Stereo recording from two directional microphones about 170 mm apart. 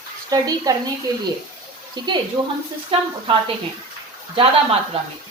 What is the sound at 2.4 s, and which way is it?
A woman's voice, 30° right (ahead or behind).